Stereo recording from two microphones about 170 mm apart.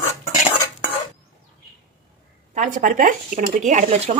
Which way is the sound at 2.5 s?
50° right (ahead or behind).